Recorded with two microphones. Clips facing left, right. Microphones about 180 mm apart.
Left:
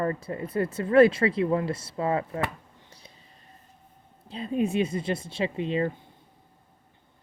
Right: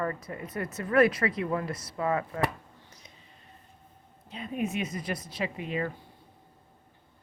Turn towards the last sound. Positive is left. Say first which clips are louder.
# left 5 dB
turn(degrees=30)  # may be behind; listen again after turning